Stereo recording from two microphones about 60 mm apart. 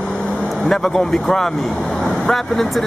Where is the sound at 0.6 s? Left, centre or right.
Centre.